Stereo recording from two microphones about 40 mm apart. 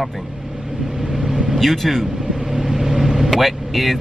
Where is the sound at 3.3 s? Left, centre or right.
Centre.